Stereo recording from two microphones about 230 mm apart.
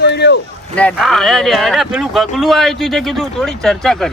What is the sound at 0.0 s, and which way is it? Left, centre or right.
Boat, left.